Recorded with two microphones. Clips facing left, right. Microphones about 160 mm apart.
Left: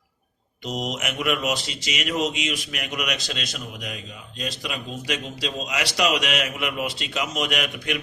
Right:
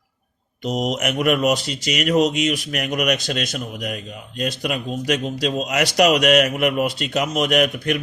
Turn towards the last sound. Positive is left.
turn(degrees=-45)  # may be behind; listen again after turning